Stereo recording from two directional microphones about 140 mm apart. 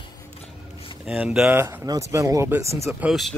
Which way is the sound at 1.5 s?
20° right (ahead or behind).